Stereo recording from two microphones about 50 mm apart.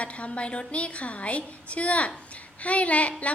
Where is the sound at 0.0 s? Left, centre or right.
Left.